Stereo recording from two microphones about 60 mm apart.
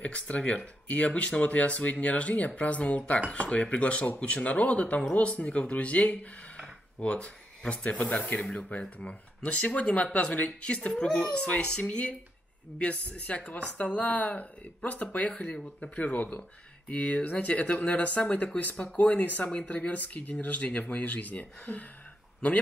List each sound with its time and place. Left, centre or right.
0.0 s speech: left
15.4 s speech: centre
15.8 s speech: left